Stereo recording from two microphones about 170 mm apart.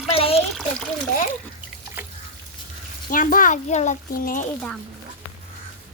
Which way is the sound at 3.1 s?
55° left (ahead or behind).